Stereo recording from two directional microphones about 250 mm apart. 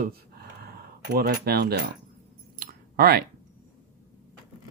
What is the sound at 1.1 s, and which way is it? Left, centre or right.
Speech, right.